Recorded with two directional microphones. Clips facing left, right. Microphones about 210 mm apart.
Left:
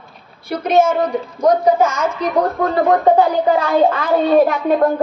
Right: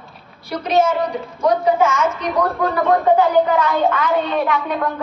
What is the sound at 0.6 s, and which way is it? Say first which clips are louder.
A child's voice: left 3 dB; 50° left (ahead or behind).